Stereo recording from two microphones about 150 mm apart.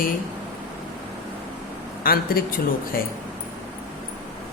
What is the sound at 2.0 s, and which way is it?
Speech, 85° left.